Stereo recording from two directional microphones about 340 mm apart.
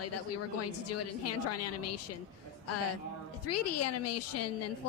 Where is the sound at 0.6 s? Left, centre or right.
Left.